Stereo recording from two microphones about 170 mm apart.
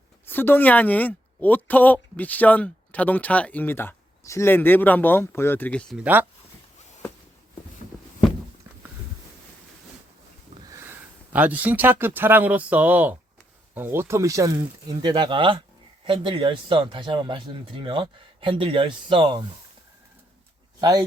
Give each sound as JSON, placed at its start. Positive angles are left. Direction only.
{"t": 0.3, "sound": "a woman's voice", "side_deg": 10}
{"t": 6.0, "sound": "speech", "side_deg": -10}
{"t": 7.9, "sound": "a sound", "side_deg": 5}
{"t": 10.7, "sound": "speech", "side_deg": -15}